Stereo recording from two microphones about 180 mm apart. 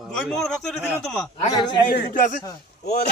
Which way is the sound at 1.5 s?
25° left (ahead or behind).